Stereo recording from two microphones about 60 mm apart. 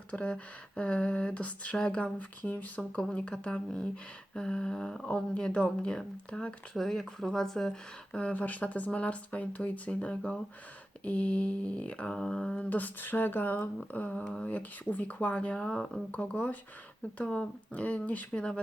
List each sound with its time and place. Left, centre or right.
0.1 s speech: left
2.1 s speech: left; by 8.2 s centre
8.2 s speech: left
12.7 s speech: left